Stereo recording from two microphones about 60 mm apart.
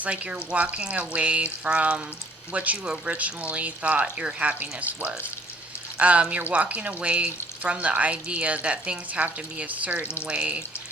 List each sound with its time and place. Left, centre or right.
0.0 s speech: right